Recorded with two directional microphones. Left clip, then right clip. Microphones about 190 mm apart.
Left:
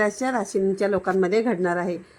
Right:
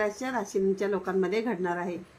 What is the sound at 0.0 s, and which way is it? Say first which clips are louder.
A woman's voice: left 6 dB; 35° left (ahead or behind).